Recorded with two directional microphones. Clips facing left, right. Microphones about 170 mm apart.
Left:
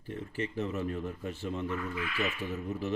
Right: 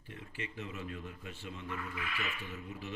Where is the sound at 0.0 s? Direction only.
40° left (ahead or behind).